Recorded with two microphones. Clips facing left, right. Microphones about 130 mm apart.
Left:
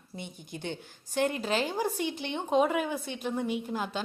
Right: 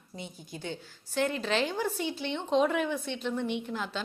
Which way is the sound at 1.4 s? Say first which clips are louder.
Even; 40° left (ahead or behind).